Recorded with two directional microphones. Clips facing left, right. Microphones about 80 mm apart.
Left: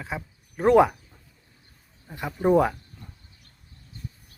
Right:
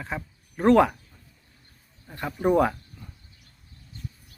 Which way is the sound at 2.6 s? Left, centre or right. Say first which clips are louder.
Right 1 dB; centre.